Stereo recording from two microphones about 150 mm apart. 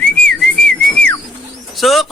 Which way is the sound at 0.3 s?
5° left (ahead or behind).